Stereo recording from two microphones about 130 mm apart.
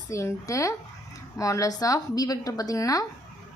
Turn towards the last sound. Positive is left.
turn(degrees=25)  # may be behind; listen again after turning